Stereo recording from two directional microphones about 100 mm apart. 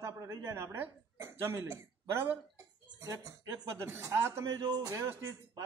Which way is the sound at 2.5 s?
35° right (ahead or behind).